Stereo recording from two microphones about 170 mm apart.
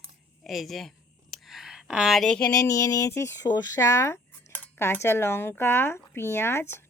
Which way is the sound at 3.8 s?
20° left (ahead or behind).